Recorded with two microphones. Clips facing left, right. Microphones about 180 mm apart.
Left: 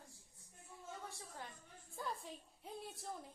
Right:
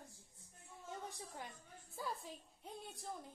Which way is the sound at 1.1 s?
15° right (ahead or behind).